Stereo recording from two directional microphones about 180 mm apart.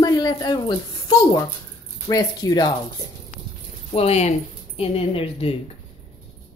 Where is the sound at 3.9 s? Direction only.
35° left (ahead or behind).